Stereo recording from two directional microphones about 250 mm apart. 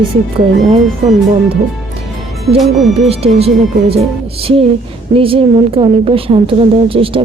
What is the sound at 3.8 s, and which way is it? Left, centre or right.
A woman's voice, right.